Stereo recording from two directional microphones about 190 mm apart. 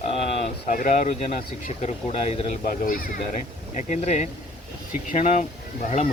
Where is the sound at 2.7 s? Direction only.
45° left (ahead or behind).